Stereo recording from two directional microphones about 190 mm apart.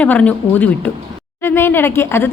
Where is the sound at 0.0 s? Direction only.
5° left (ahead or behind).